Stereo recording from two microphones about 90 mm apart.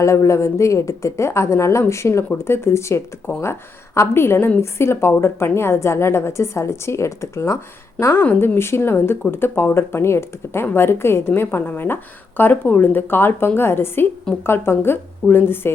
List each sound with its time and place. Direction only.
0.0 s a woman's voice: 35° left (ahead or behind)